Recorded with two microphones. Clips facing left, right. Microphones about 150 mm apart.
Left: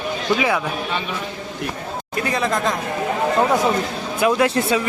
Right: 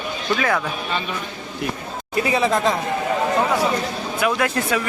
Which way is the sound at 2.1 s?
5° right (ahead or behind).